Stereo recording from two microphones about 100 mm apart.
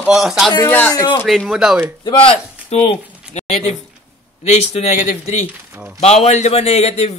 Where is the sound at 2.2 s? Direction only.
75° left (ahead or behind).